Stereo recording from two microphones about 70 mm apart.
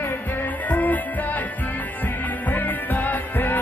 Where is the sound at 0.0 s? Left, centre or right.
Left.